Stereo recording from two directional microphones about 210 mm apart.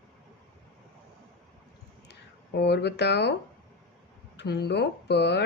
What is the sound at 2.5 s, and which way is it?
Speech, 50° left (ahead or behind).